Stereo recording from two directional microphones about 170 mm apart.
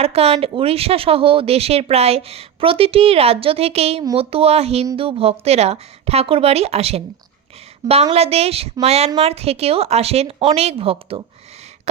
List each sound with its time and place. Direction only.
0.0 s speech: 35° right (ahead or behind)
8.1 s speech: 35° right (ahead or behind)